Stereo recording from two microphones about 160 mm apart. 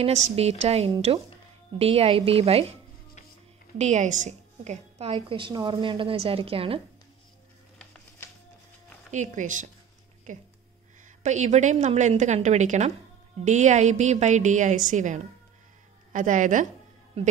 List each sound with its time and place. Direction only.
0.0 s a woman's voice: 40° right (ahead or behind)
3.7 s a woman's voice: 45° right (ahead or behind)
5.1 s a woman's voice: 30° right (ahead or behind)
9.1 s a woman's voice: 50° right (ahead or behind)
17.2 s a woman's voice: 35° right (ahead or behind)